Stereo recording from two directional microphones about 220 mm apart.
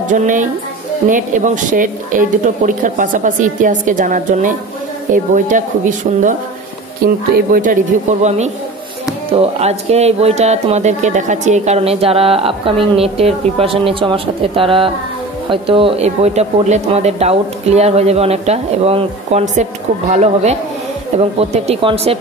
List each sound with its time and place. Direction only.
0.1 s speech: 35° right (ahead or behind)